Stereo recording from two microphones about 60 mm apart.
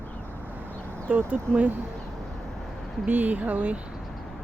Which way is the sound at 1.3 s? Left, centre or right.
Right.